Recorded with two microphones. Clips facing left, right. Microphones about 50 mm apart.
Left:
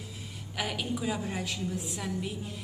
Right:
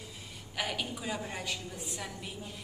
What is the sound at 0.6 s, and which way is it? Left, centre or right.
A woman's voice, centre.